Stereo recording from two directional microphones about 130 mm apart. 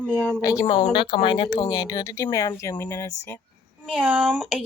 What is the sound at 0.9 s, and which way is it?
Speech, 40° left (ahead or behind).